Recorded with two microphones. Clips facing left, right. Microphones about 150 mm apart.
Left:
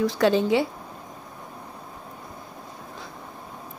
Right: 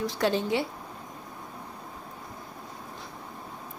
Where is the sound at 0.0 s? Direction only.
90° left.